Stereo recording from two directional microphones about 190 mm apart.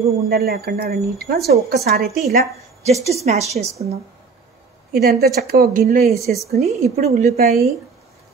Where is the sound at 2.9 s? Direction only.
35° right (ahead or behind).